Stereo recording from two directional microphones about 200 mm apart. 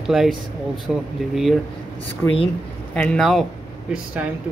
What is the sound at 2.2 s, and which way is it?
Speech, 10° left (ahead or behind).